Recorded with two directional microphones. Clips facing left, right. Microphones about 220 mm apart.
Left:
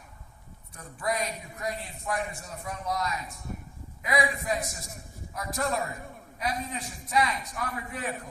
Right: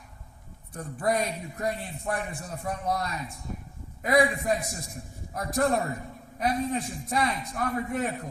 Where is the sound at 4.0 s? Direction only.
50° right (ahead or behind).